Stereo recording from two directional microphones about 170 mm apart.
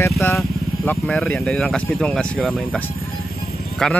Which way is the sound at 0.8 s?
Centre (ahead or behind).